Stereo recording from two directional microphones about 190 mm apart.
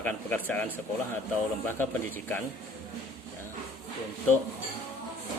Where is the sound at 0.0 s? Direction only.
10° left (ahead or behind).